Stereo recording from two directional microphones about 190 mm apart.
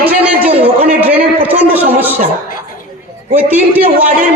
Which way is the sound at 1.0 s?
10° right (ahead or behind).